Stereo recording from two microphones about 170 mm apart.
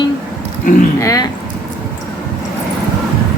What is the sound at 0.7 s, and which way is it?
Speech, 50° left (ahead or behind).